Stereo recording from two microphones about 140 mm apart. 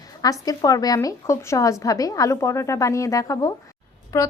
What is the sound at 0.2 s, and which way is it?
A woman's voice, 25° left (ahead or behind).